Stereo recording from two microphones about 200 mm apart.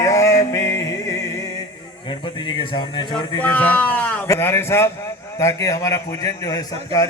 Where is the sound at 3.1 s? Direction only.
5° left (ahead or behind).